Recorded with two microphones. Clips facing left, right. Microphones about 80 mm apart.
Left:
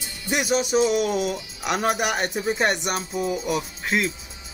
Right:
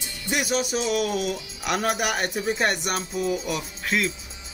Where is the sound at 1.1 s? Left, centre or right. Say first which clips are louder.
Left 2 dB; centre.